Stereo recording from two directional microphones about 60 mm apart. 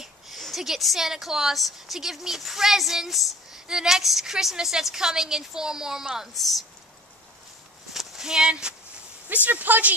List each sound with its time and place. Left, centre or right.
0.4 s a woman's voice: centre
7.9 s a sound: centre
9.3 s speech: right